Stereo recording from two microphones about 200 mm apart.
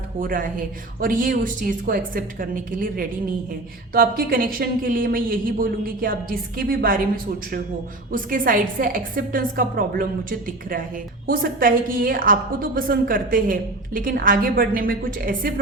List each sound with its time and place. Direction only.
0.2 s a woman's voice: 45° right (ahead or behind)
8.1 s a woman's voice: 45° right (ahead or behind)